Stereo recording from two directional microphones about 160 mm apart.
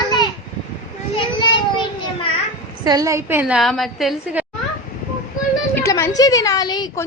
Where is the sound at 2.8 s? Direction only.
25° right (ahead or behind).